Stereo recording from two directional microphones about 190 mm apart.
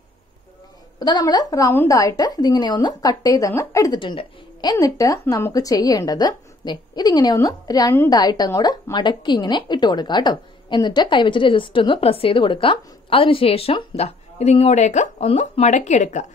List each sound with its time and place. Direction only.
0.9 s a woman's voice: 20° left (ahead or behind); by 16.3 s 40° left (ahead or behind)